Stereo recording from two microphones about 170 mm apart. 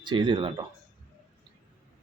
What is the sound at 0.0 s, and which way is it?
Speech, 25° right (ahead or behind).